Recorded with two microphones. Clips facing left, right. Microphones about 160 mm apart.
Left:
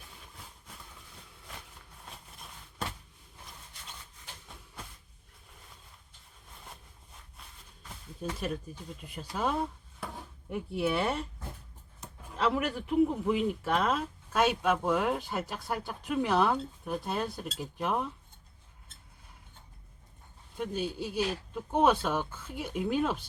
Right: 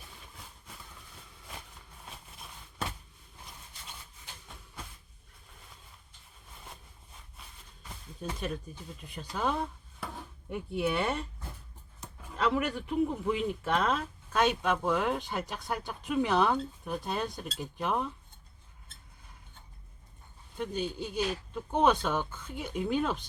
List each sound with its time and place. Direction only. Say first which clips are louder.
8.2 s a man's voice: left 1 dB; 5° left (ahead or behind)
12.4 s a man's voice: even; 5° left (ahead or behind)
20.6 s a man's voice: even; 5° left (ahead or behind)